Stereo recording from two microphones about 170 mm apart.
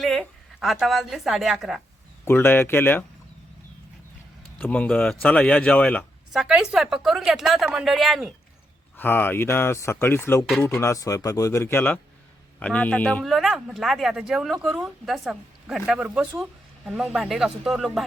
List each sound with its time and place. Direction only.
0.0 s speech: centre (ahead or behind)
2.2 s speech: 10° left (ahead or behind)
4.5 s speech: 10° left (ahead or behind)
6.3 s a man's voice: 5° right (ahead or behind)
9.0 s a man's voice: 10° left (ahead or behind)